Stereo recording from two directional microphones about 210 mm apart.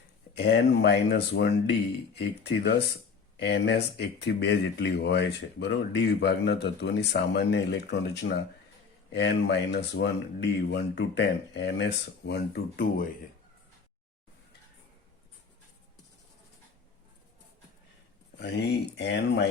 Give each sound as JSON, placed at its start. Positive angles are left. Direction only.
{"t": 0.3, "sound": "speech", "side_deg": 55}
{"t": 18.3, "sound": "speech", "side_deg": 50}